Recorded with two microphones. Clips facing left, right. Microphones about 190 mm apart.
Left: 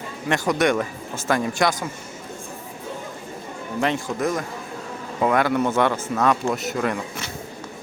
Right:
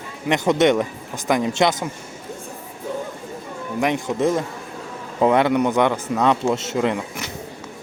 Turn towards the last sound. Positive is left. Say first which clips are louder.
# right 3 dB
turn(degrees=-20)  # may be behind; listen again after turning